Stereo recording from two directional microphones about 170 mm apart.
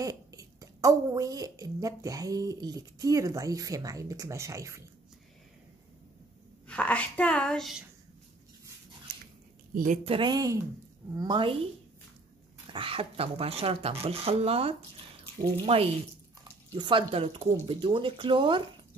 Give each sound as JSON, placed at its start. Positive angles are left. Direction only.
{"t": 0.0, "sound": "a woman's voice", "side_deg": -20}
{"t": 6.7, "sound": "speech", "side_deg": 10}
{"t": 10.0, "sound": "a woman's voice", "side_deg": -30}
{"t": 12.7, "sound": "a woman's voice", "side_deg": -35}